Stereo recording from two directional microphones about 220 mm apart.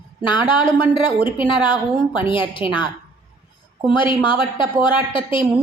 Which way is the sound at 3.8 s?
20° left (ahead or behind).